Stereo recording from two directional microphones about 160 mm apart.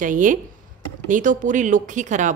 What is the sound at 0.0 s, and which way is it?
A woman's voice, 55° right (ahead or behind).